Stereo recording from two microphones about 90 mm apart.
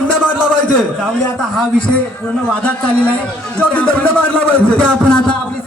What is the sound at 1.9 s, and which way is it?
A man's voice, 15° left (ahead or behind).